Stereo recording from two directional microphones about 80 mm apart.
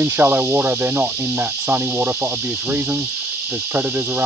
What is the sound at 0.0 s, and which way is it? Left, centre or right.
Cricket, right.